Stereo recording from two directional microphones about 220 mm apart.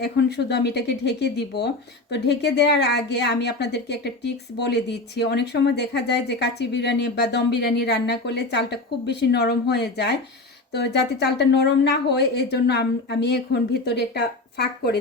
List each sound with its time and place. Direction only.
0.0 s speech: 50° left (ahead or behind)